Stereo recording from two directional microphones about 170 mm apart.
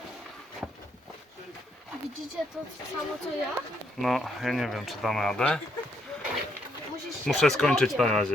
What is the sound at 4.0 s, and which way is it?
Speech, centre (ahead or behind).